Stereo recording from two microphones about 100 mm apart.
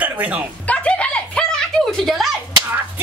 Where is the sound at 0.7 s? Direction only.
15° left (ahead or behind).